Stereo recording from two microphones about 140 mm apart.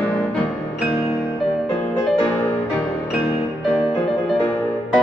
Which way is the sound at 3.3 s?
25° left (ahead or behind).